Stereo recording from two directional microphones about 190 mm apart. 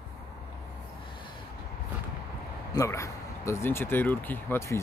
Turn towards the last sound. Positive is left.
turn(degrees=15)  # may be behind; listen again after turning